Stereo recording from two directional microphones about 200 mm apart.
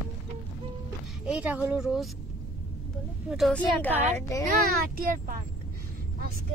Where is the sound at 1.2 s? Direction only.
5° right (ahead or behind).